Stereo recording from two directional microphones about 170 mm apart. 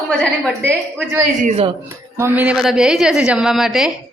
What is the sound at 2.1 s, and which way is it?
A woman's voice, 10° right (ahead or behind).